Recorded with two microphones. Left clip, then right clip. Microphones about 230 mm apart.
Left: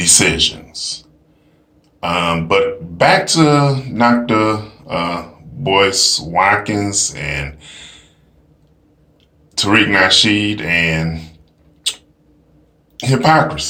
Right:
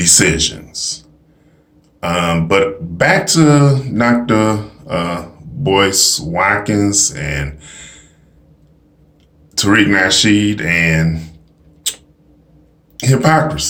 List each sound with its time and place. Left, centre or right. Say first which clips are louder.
0.0 s speech: even; centre
2.0 s speech: even; centre
9.6 s speech: even; centre
13.0 s speech: left 1 dB; centre